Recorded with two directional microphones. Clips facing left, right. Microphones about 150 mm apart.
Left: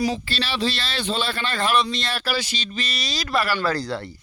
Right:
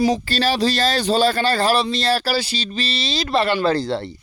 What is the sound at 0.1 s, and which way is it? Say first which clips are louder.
Speech: right 7 dB; 40° right (ahead or behind).